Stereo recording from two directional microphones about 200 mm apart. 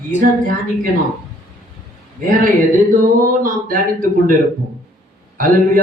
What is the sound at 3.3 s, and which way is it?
Speech, 45° right (ahead or behind).